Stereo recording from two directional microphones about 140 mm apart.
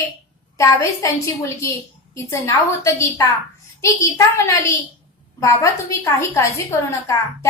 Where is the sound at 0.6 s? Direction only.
20° left (ahead or behind).